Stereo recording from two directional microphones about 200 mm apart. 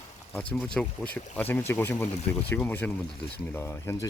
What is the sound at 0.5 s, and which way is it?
Speech, 5° left (ahead or behind).